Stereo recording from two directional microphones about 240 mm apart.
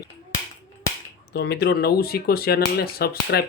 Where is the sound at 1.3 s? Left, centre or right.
Left.